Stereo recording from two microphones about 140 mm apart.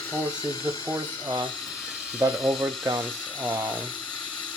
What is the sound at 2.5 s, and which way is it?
Speech, 5° right (ahead or behind).